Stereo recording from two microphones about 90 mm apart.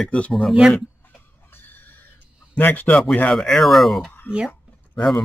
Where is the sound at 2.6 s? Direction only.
20° left (ahead or behind).